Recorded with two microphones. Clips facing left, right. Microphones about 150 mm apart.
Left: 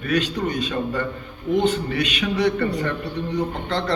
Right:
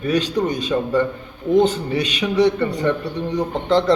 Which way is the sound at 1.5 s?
40° right (ahead or behind).